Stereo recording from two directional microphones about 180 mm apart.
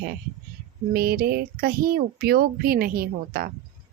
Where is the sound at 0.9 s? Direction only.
55° right (ahead or behind).